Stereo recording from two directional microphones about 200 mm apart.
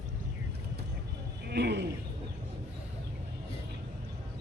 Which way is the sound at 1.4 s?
55° right (ahead or behind).